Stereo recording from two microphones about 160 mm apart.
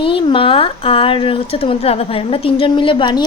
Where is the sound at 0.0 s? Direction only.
35° left (ahead or behind).